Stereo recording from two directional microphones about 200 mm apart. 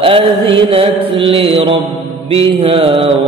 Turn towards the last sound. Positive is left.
turn(degrees=-30)  # may be behind; listen again after turning